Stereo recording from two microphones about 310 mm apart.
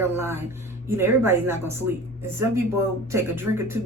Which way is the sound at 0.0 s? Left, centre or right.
Centre.